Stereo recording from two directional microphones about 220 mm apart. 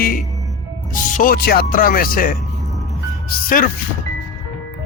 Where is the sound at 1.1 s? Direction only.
40° left (ahead or behind).